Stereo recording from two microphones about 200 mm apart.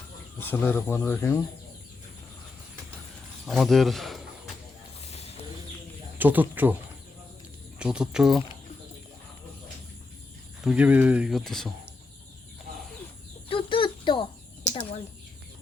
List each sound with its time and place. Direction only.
0.3 s speech: 10° left (ahead or behind)
3.4 s speech: centre (ahead or behind)
4.9 s mechanisms: 30° left (ahead or behind)
6.1 s speech: 10° right (ahead or behind)
7.8 s speech: 5° right (ahead or behind)
10.6 s speech: 5° right (ahead or behind)
13.5 s cricket: 25° left (ahead or behind)